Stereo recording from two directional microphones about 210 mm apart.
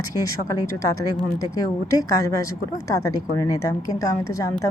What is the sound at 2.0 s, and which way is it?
Speech, 15° left (ahead or behind).